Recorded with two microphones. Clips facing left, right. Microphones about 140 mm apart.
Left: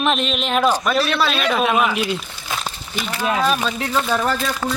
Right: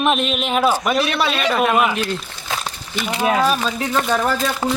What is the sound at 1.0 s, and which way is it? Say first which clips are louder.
Speech: even; 20° right (ahead or behind).